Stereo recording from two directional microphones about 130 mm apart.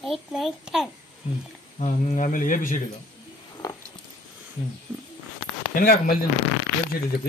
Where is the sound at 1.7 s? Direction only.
60° left (ahead or behind); by 2.7 s 90° left.